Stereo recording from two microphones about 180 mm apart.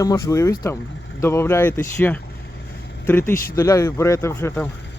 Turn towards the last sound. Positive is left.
turn(degrees=15)  # may be behind; listen again after turning